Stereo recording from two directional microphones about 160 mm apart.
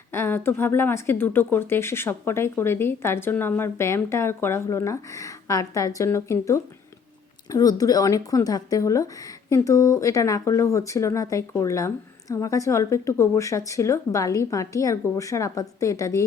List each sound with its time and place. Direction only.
0.1 s a woman's voice: 15° left (ahead or behind)